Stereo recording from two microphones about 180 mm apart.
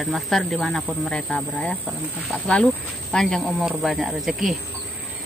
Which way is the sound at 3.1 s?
5° left (ahead or behind).